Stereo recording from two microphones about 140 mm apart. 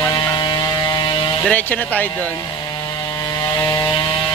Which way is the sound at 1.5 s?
10° left (ahead or behind).